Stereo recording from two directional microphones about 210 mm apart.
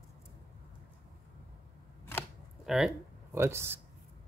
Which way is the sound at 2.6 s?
Centre (ahead or behind).